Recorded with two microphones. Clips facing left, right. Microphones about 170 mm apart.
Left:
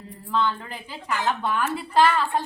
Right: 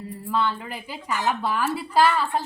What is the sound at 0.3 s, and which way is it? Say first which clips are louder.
Speech: even; 10° right (ahead or behind).